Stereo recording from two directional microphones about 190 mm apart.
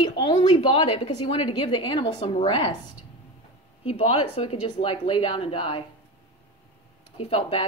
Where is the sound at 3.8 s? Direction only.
30° left (ahead or behind).